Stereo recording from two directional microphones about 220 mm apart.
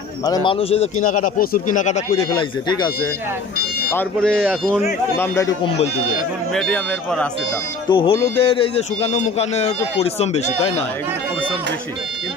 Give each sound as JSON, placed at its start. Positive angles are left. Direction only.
{"t": 0.2, "sound": "speech", "side_deg": 20}
{"t": 1.1, "sound": "speech", "side_deg": 40}
{"t": 3.9, "sound": "speech", "side_deg": 5}
{"t": 6.5, "sound": "speech", "side_deg": 5}
{"t": 7.9, "sound": "speech", "side_deg": 20}